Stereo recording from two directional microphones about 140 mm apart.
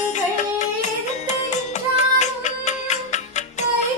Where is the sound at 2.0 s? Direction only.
55° left (ahead or behind).